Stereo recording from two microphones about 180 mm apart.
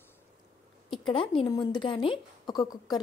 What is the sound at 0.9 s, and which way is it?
Speech, 30° left (ahead or behind).